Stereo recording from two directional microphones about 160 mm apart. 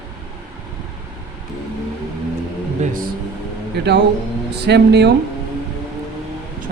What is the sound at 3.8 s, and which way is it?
Speech, 90° right.